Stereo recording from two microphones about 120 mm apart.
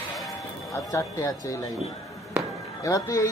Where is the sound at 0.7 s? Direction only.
25° left (ahead or behind).